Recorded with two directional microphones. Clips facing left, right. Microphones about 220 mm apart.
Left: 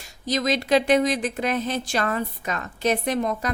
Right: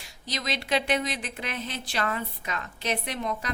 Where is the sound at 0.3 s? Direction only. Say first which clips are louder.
Left 8 dB; 45° left (ahead or behind).